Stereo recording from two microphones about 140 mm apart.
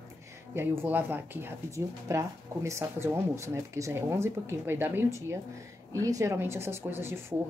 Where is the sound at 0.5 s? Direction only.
15° right (ahead or behind).